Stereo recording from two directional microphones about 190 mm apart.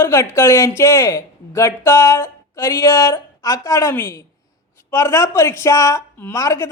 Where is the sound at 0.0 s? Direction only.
15° left (ahead or behind).